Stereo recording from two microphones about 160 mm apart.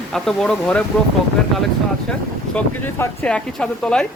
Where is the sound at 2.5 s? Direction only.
5° left (ahead or behind).